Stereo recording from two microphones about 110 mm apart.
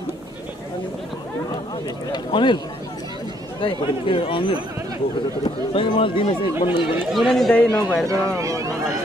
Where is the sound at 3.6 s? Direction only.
55° left (ahead or behind).